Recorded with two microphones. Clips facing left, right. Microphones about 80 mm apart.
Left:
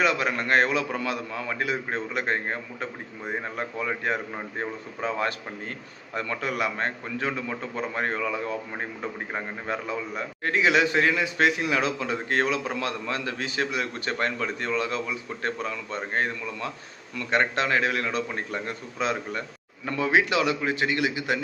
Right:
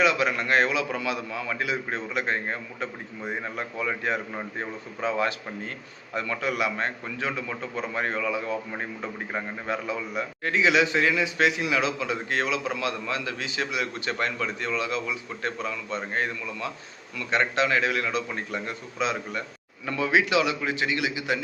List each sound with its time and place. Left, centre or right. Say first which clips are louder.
0.0 s a man's voice: right 1 dB; left
10.4 s a man's voice: even; left